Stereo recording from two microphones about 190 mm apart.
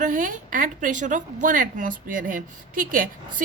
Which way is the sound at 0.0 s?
45° right (ahead or behind).